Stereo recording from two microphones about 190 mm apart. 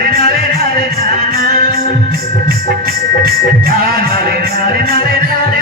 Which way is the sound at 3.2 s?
50° right (ahead or behind).